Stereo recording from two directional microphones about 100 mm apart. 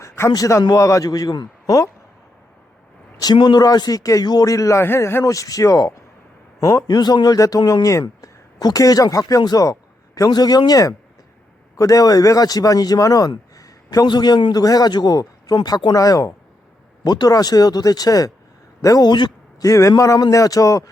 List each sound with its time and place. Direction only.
0.0 s a man's voice: 30° left (ahead or behind)
3.3 s speech: 50° left (ahead or behind)
19.6 s speech: 35° left (ahead or behind)